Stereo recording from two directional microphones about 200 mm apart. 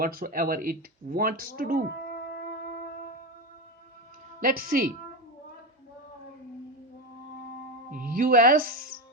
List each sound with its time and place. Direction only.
0.0 s speech: 45° right (ahead or behind)
2.0 s music: 50° left (ahead or behind)
4.4 s speech: 45° right (ahead or behind)
7.9 s speech: 45° right (ahead or behind)